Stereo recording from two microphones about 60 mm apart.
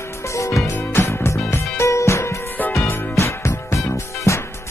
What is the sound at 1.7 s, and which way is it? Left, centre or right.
Music, left.